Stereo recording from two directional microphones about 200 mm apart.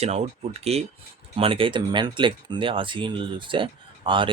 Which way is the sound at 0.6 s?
30° right (ahead or behind).